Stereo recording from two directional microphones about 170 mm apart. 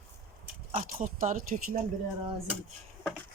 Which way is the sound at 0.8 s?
50° right (ahead or behind).